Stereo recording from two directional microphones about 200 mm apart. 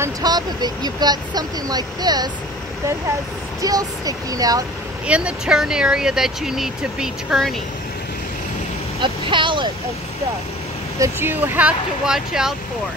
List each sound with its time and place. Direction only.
0.0 s speech: 20° right (ahead or behind)
3.6 s speech: 20° right (ahead or behind)
5.0 s speech: 5° right (ahead or behind)
9.0 s speech: 25° right (ahead or behind)
11.0 s speech: 10° right (ahead or behind)